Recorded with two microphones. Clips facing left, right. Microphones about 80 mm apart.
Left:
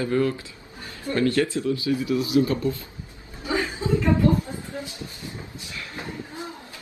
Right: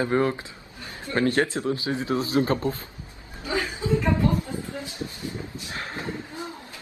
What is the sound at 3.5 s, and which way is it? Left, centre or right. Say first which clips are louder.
Chuckle: left 2 dB; left.